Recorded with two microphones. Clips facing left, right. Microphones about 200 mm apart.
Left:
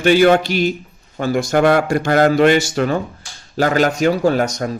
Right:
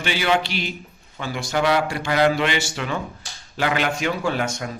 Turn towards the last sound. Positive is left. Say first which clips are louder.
# left 8 dB
turn(degrees=40)  # may be behind; listen again after turning